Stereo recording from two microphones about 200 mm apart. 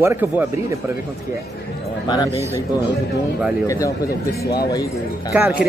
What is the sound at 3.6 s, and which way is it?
Speech, 15° left (ahead or behind).